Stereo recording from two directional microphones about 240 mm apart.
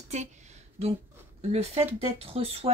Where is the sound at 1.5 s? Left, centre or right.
Right.